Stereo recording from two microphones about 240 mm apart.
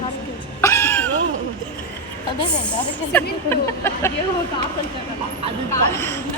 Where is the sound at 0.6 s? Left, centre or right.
Centre.